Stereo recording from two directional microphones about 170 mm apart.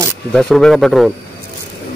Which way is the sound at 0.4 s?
Centre (ahead or behind).